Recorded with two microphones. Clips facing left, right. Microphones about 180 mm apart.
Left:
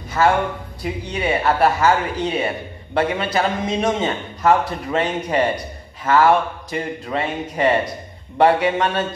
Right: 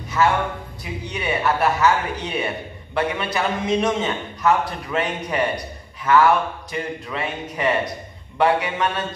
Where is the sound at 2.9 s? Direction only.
30° left (ahead or behind).